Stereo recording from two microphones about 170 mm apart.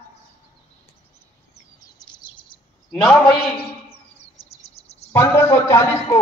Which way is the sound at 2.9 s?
5° left (ahead or behind).